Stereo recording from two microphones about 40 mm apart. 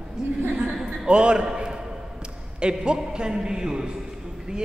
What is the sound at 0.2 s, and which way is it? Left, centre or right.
A woman's voice, centre.